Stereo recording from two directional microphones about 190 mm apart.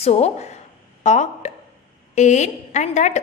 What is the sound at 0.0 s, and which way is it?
A woman's voice, 35° left (ahead or behind).